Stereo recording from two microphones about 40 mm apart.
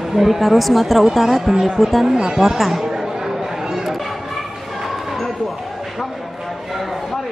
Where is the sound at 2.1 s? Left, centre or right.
Centre.